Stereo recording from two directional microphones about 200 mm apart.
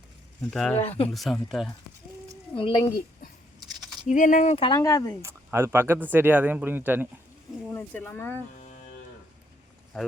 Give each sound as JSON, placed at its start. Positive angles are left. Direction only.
{"t": 0.5, "sound": "speech", "side_deg": 0}
{"t": 0.8, "sound": "speech", "side_deg": 30}
{"t": 1.1, "sound": "speech", "side_deg": 0}
{"t": 2.6, "sound": "speech", "side_deg": 25}
{"t": 3.8, "sound": "a sound", "side_deg": 0}
{"t": 4.1, "sound": "speech", "side_deg": 40}
{"t": 5.2, "sound": "speech", "side_deg": -15}
{"t": 7.7, "sound": "speech", "side_deg": 10}